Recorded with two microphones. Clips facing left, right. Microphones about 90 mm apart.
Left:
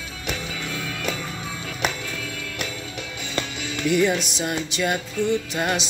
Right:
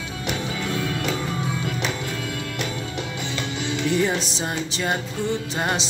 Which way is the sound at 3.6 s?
30° right (ahead or behind).